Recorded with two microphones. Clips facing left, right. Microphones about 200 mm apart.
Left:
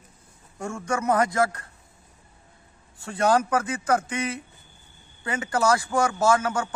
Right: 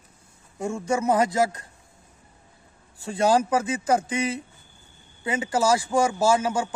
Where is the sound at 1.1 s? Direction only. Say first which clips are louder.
Right 1 dB; 20° right (ahead or behind).